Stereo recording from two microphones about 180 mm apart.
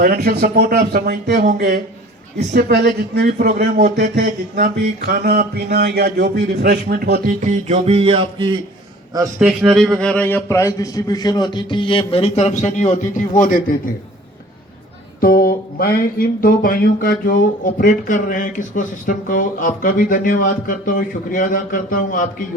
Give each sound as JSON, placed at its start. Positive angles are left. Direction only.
{"t": 0.0, "sound": "speech", "side_deg": -55}
{"t": 7.4, "sound": "music", "side_deg": -40}
{"t": 9.4, "sound": "speech", "side_deg": 0}
{"t": 15.2, "sound": "speech", "side_deg": 55}